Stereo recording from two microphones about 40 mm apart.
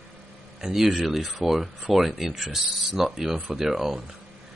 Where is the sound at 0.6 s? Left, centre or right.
Centre.